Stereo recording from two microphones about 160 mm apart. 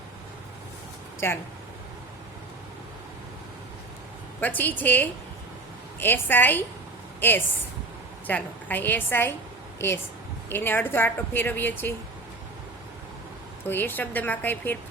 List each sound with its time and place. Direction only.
1.2 s a woman's voice: 15° left (ahead or behind)
4.4 s a woman's voice: 10° left (ahead or behind)
13.7 s a woman's voice: 10° left (ahead or behind)